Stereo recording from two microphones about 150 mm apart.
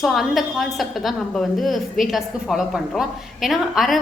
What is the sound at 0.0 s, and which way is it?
A woman's voice, centre (ahead or behind).